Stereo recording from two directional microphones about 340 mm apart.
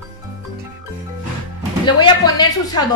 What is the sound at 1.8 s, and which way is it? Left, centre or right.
A woman's voice, centre.